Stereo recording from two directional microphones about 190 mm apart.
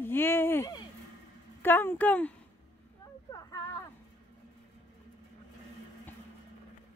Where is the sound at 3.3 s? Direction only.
20° left (ahead or behind).